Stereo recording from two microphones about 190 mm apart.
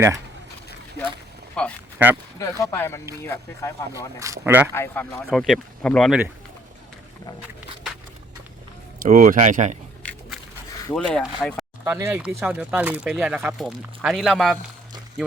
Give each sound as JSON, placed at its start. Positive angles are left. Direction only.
{"t": 1.6, "sound": "speech", "side_deg": 5}
{"t": 2.0, "sound": "speech", "side_deg": -10}
{"t": 2.4, "sound": "speech", "side_deg": 15}
{"t": 4.2, "sound": "speech", "side_deg": -15}
{"t": 4.7, "sound": "speech", "side_deg": 10}
{"t": 9.0, "sound": "speech", "side_deg": -45}
{"t": 10.0, "sound": "biting", "side_deg": 5}
{"t": 10.9, "sound": "speech", "side_deg": 0}
{"t": 11.9, "sound": "speech", "side_deg": -10}